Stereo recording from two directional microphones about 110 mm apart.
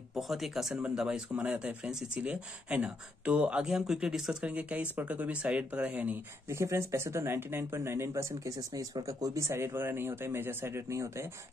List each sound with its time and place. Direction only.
0.1 s speech: centre (ahead or behind)
6.6 s speech: 25° right (ahead or behind)